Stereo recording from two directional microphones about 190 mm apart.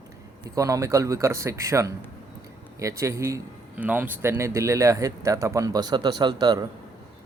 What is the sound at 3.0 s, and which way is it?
A man's voice, 15° right (ahead or behind).